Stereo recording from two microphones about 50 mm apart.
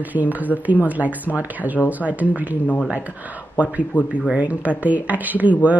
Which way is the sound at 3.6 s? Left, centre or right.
Right.